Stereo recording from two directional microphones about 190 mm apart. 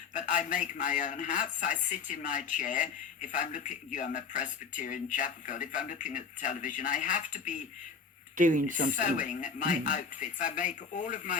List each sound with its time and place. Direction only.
0.1 s a man's voice: 40° left (ahead or behind)
8.4 s speech: 45° right (ahead or behind)
9.0 s speech: 40° left (ahead or behind)